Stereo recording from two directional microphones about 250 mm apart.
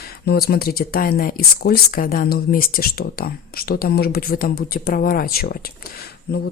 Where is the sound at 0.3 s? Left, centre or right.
Left.